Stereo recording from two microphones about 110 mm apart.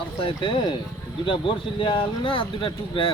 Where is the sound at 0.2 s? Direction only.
50° left (ahead or behind).